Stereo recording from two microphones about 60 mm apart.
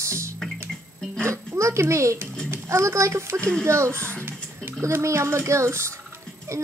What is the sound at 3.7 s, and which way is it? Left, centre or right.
Speech, right.